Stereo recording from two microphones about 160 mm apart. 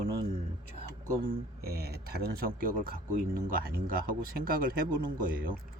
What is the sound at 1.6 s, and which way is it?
Speech, 80° right.